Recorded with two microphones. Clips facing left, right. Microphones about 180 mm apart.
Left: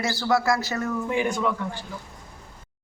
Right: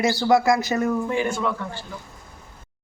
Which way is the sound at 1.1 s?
15° left (ahead or behind).